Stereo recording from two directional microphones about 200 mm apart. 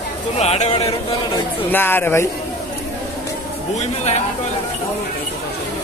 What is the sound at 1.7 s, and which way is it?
Speech, 10° left (ahead or behind).